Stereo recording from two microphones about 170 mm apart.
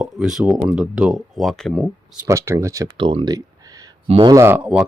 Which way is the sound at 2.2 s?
15° right (ahead or behind).